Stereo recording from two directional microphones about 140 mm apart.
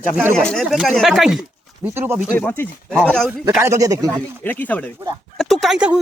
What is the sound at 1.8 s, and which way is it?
Speech, 15° right (ahead or behind).